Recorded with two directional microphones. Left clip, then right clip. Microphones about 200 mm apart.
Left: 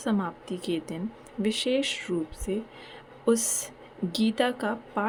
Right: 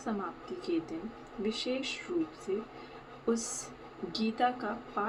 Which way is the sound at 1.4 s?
55° left (ahead or behind).